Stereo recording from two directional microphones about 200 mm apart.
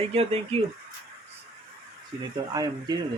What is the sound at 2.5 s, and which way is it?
Speech, 20° right (ahead or behind).